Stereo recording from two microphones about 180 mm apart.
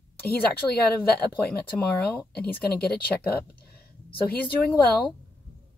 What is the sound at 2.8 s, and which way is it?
Speech, 60° left (ahead or behind).